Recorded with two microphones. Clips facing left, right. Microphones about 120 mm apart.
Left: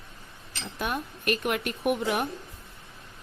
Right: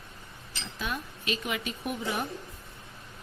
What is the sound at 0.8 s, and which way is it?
A woman's voice, 55° left (ahead or behind).